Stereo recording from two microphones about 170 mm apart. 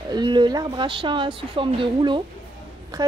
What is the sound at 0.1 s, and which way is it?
Speech, 25° right (ahead or behind).